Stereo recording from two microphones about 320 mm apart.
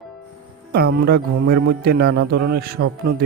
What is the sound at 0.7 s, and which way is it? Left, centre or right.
Speech, right.